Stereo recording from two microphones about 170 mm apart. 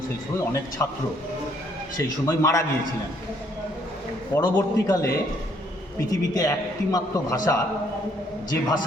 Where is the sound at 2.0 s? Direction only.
20° left (ahead or behind).